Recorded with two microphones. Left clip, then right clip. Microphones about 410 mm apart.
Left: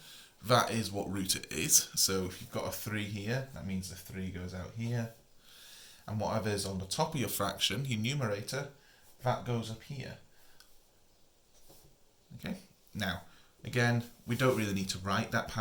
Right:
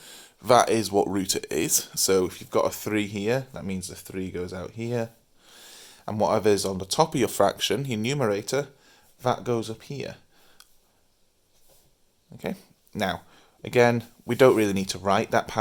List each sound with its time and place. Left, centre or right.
0.0 s speech: centre
10.6 s tick: centre
12.4 s speech: centre